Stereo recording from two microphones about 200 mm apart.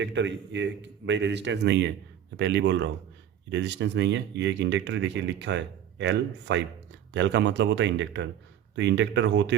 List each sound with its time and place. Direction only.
0.0 s speech: 60° right (ahead or behind)